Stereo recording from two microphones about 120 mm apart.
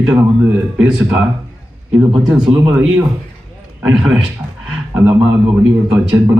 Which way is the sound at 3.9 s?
10° right (ahead or behind).